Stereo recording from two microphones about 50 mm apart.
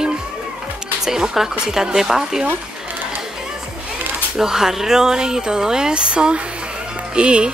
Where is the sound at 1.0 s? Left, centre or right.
Centre.